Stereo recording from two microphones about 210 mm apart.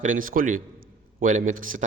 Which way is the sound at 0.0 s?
40° right (ahead or behind).